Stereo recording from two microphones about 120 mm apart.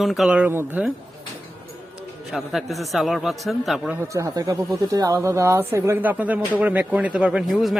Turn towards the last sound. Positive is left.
turn(degrees=0)  # may be behind; listen again after turning